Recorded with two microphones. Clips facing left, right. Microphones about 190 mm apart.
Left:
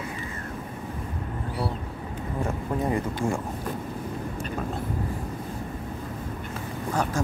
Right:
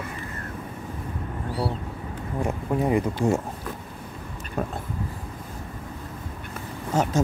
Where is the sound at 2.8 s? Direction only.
15° right (ahead or behind).